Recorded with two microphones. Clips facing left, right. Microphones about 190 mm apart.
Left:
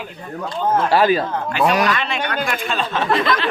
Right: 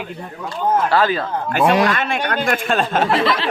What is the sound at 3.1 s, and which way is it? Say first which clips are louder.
Speech: right 1 dB; 30° right (ahead or behind).